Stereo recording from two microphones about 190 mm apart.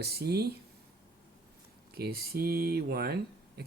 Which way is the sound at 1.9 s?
55° right (ahead or behind).